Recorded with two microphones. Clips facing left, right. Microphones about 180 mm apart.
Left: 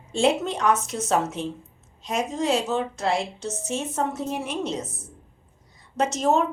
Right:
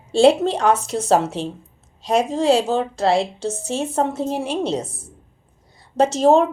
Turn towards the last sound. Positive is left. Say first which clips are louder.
# right 7 dB
turn(degrees=-30)  # may be behind; listen again after turning